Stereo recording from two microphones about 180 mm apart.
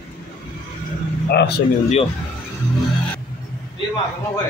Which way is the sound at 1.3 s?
65° left (ahead or behind).